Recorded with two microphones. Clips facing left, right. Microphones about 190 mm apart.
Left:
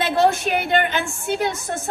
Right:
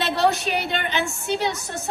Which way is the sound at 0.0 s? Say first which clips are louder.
Left 3 dB; 50° left (ahead or behind).